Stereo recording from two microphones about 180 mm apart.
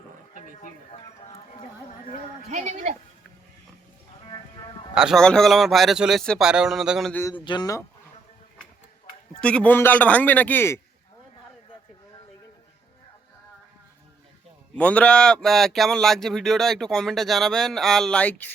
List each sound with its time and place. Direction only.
2.5 s a woman's voice: 40° right (ahead or behind)
4.9 s speech: centre (ahead or behind)
7.1 s speech: 15° left (ahead or behind)
7.3 s speech: 25° left (ahead or behind)
9.4 s speech: 5° left (ahead or behind)
14.8 s speech: 5° left (ahead or behind)